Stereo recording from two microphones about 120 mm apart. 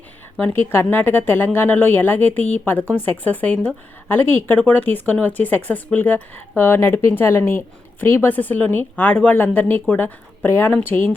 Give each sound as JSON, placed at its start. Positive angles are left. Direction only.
{"t": 0.3, "sound": "a woman's voice", "side_deg": 15}